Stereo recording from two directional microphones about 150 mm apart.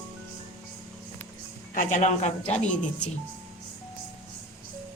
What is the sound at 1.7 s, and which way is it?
Speech, 55° left (ahead or behind).